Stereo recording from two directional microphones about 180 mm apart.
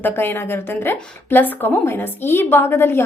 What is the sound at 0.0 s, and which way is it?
A woman's voice, 10° left (ahead or behind).